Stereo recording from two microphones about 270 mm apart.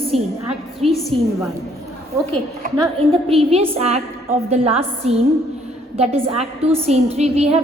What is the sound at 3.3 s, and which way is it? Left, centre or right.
A woman's voice, right.